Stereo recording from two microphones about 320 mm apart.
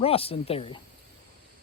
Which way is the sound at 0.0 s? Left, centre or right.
Centre.